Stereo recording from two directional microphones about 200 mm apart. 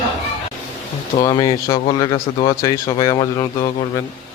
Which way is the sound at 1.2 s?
20° left (ahead or behind).